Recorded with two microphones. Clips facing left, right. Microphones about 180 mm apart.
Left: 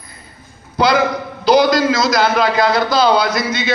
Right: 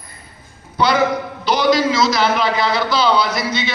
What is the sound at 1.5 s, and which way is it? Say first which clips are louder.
A man's voice: left 4 dB; 40° left (ahead or behind).